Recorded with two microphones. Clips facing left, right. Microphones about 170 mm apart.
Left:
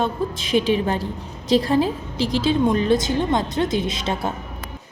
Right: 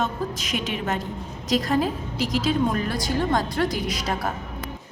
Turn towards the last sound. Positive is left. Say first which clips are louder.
# left 2 dB
turn(degrees=25)  # may be behind; listen again after turning